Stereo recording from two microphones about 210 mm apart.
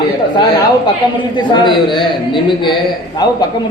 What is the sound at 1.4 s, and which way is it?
A man's voice, 20° left (ahead or behind).